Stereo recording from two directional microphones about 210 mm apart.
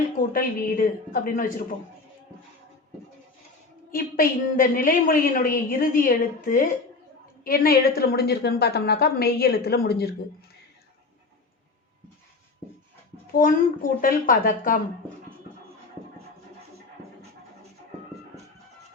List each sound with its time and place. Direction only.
0.2 s a woman's voice: 45° left (ahead or behind)
3.9 s a woman's voice: 45° left (ahead or behind)
13.3 s a woman's voice: 40° left (ahead or behind)